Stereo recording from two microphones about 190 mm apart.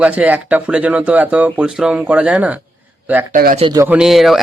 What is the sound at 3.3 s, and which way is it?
Speech, 50° right (ahead or behind).